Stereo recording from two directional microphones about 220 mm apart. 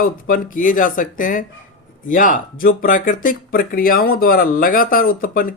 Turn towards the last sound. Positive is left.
turn(degrees=40)  # may be behind; listen again after turning